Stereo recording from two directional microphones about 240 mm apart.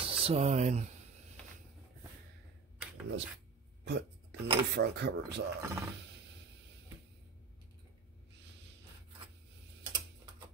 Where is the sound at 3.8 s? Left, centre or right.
Right.